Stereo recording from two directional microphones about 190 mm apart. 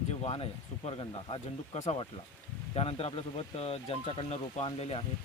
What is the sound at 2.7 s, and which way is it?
Speech, 30° left (ahead or behind).